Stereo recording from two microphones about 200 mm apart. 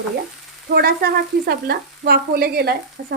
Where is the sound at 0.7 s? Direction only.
50° right (ahead or behind).